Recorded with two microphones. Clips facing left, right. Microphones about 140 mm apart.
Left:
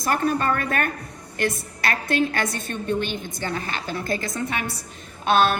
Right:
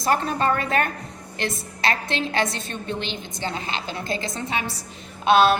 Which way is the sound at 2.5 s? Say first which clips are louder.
Left 4 dB; 50° left (ahead or behind).